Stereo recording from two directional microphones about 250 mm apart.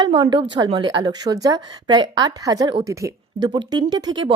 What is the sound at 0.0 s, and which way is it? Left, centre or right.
Speech, centre.